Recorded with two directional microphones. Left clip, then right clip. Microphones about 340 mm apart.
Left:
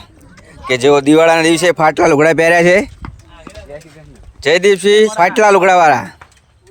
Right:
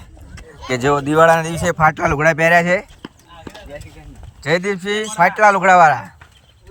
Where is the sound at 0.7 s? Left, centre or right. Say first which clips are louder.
Left 7 dB; left.